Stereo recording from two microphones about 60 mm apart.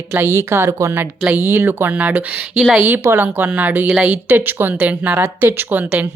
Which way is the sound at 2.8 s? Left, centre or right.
Right.